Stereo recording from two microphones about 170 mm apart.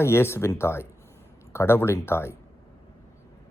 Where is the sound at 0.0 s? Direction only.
15° left (ahead or behind).